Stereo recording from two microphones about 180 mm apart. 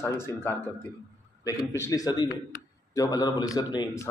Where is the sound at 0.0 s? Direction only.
10° left (ahead or behind).